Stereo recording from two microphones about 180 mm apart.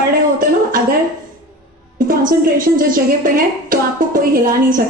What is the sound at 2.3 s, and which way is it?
A woman's voice, 50° right (ahead or behind).